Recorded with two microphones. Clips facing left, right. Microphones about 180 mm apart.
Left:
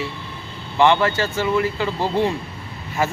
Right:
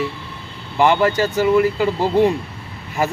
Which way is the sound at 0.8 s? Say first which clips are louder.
Right 1 dB; 10° right (ahead or behind).